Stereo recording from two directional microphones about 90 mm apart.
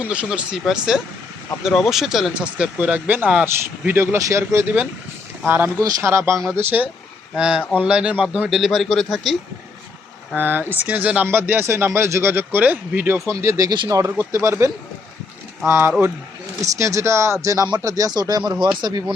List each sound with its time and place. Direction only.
0.0 s speech: 15° right (ahead or behind); by 6.3 s 30° right (ahead or behind)
6.3 s a man's voice: 5° left (ahead or behind)
6.6 s speech: 20° right (ahead or behind)
7.3 s a man's voice: 10° right (ahead or behind)
10.3 s speech: 20° right (ahead or behind)
16.6 s speech: 35° right (ahead or behind); by 19.0 s 50° right (ahead or behind)